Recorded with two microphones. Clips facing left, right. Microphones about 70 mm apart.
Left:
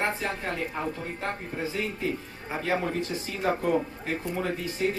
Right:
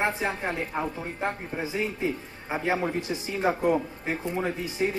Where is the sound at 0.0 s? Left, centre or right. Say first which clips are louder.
Right 2 dB; centre.